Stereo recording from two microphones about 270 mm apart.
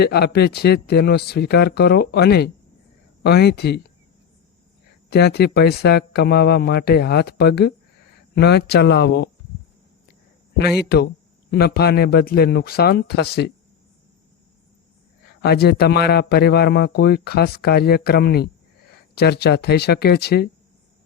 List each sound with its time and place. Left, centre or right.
0.0 s speech: left
5.0 s speech: left
10.8 s speech: left
15.4 s speech: left